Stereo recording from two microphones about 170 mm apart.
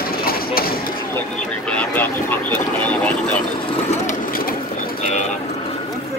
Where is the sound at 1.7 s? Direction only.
10° left (ahead or behind).